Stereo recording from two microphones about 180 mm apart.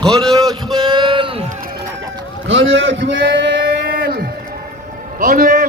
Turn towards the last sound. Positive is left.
turn(degrees=-55)  # may be behind; listen again after turning